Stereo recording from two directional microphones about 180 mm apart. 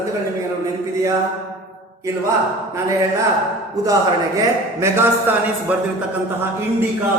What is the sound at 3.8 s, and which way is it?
A man's voice, 20° right (ahead or behind).